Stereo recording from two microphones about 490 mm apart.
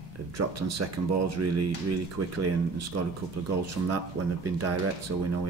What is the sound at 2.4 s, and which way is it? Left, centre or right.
Speech, right.